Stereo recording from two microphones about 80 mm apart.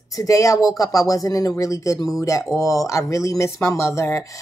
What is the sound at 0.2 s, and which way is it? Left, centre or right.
Speech, left.